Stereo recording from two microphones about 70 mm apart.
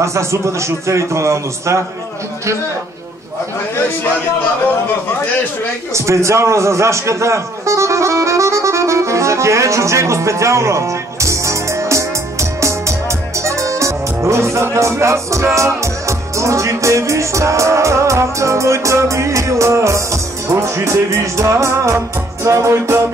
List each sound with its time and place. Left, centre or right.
0.0 s a man's voice: right
5.9 s a sound: right
13.4 s speech: right